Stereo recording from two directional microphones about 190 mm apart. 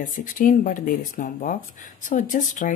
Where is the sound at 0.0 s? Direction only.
45° left (ahead or behind).